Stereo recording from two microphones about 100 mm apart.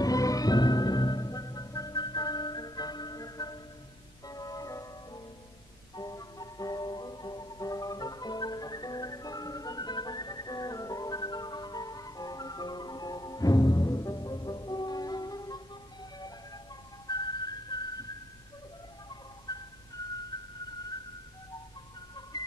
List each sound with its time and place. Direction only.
0.0 s music: 35° left (ahead or behind)
17.1 s whistling: 45° left (ahead or behind)
19.5 s music: 40° left (ahead or behind)
22.3 s music: 45° left (ahead or behind)